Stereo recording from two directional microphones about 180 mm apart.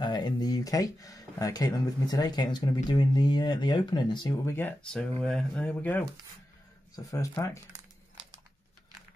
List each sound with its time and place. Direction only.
0.0 s speech: 25° left (ahead or behind)
4.5 s speech: 10° left (ahead or behind)
7.1 s speech: 20° left (ahead or behind)